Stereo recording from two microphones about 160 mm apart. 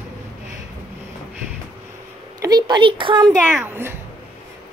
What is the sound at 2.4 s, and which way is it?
Speech, 25° right (ahead or behind).